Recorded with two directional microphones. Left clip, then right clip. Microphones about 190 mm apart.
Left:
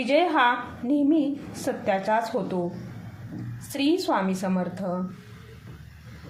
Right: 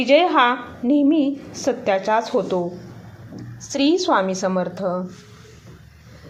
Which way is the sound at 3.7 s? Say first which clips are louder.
Right 6 dB; 15° right (ahead or behind).